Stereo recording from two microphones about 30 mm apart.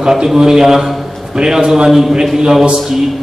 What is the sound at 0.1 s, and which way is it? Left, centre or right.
A man's voice, centre.